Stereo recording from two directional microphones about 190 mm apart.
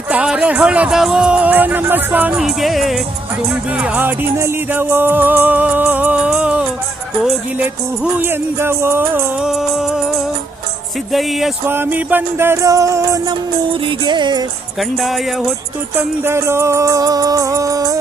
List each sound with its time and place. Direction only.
0.1 s music: 5° right (ahead or behind)
11.6 s music: 10° right (ahead or behind)
14.8 s music: centre (ahead or behind)
16.0 s music: 10° right (ahead or behind)